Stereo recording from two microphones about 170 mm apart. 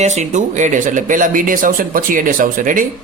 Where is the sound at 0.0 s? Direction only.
45° right (ahead or behind).